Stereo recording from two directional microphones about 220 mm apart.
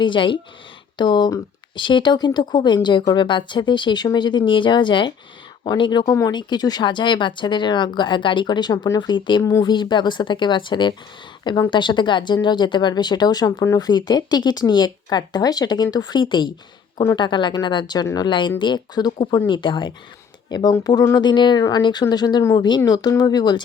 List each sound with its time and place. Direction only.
0.0 s speech: 20° left (ahead or behind)